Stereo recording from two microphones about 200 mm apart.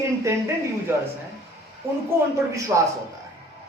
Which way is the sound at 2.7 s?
15° right (ahead or behind).